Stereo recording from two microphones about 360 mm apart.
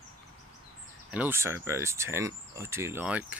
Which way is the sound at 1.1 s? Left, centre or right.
Centre.